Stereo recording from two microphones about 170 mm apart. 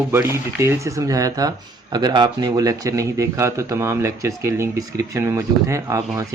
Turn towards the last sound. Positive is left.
turn(degrees=-20)  # may be behind; listen again after turning